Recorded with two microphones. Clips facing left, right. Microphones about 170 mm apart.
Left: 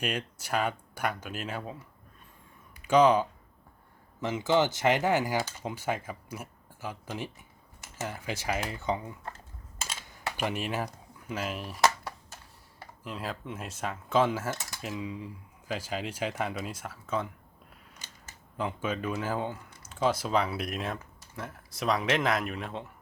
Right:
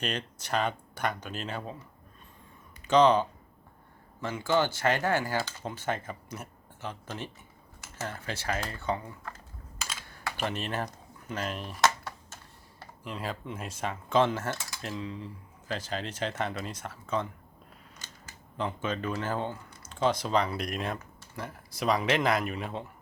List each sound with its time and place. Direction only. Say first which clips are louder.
0.0 s speech: left 1 dB; 10° left (ahead or behind)
2.8 s speech: even; 10° left (ahead or behind)
9.8 s camera: left 1 dB; 20° left (ahead or behind)
13.1 s speech: right 1 dB; centre (ahead or behind)
14.5 s speech: even; 20° left (ahead or behind)
14.8 s speech: left 1 dB; 10° left (ahead or behind)
18.5 s speech: even; 5° left (ahead or behind)